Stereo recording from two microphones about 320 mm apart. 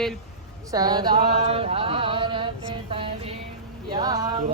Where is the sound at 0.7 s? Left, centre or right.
Centre.